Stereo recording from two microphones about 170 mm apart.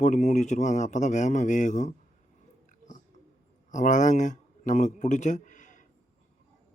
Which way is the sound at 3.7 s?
45° left (ahead or behind).